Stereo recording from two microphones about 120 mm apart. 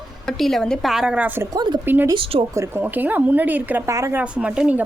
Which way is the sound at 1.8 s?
15° right (ahead or behind).